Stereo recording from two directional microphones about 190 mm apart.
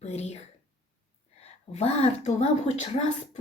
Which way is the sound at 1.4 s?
35° left (ahead or behind).